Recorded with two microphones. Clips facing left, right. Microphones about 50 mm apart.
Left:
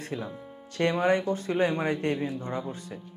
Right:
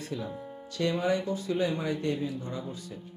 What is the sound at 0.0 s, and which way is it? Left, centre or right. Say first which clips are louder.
Speech: left 1 dB; left.